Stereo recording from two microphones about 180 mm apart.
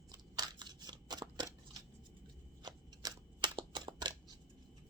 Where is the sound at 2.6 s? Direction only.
25° right (ahead or behind).